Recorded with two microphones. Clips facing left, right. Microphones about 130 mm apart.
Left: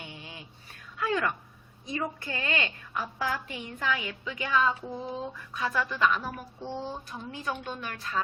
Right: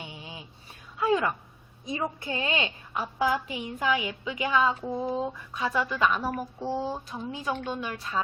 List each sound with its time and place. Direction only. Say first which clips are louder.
0.0 s a sound: right 2 dB; 20° right (ahead or behind)
1.9 s a woman's voice: right 2 dB; 20° right (ahead or behind)
7.1 s a woman's voice: right 3 dB; 20° right (ahead or behind)